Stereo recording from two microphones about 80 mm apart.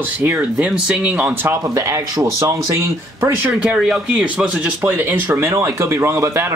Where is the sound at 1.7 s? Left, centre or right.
Right.